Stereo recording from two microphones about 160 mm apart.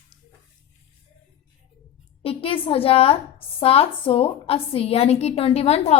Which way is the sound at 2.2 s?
35° left (ahead or behind).